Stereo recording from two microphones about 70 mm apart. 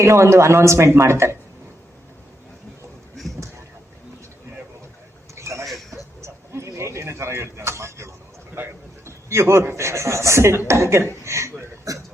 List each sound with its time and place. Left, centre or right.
0.0 s a man's voice: right
5.3 s a sound: right
8.6 s a man's voice: right